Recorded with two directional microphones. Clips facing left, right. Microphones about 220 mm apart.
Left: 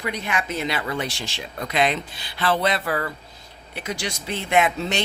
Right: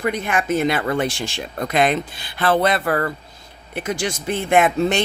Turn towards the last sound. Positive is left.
turn(degrees=-50)  # may be behind; listen again after turning